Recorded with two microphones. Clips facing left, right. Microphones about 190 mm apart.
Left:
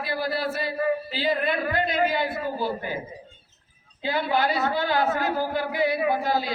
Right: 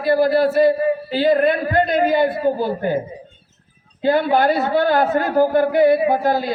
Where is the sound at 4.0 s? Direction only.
50° right (ahead or behind).